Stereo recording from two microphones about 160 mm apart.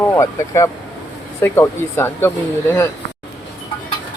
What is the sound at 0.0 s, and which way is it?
Speech, 20° left (ahead or behind).